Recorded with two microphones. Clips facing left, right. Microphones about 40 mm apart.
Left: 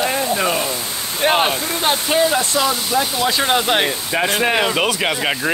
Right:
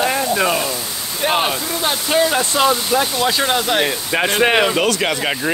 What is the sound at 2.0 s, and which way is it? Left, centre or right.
Speech, centre.